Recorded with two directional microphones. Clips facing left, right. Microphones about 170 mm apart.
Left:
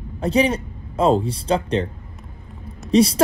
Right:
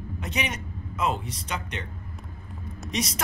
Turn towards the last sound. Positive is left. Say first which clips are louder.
# left 15 dB
turn(degrees=30)  # may be behind; listen again after turning